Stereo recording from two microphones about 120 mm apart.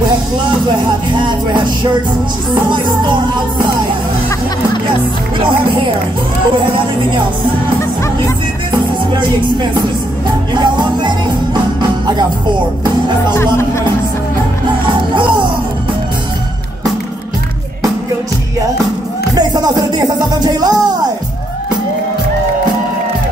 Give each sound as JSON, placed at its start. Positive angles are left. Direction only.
{"t": 1.2, "sound": "music", "side_deg": -40}
{"t": 10.5, "sound": "music", "side_deg": -40}
{"t": 13.3, "sound": "speech", "side_deg": 20}
{"t": 15.1, "sound": "music", "side_deg": -40}
{"t": 19.3, "sound": "music", "side_deg": -35}